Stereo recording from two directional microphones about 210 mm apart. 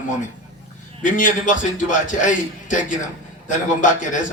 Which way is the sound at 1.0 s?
40° left (ahead or behind).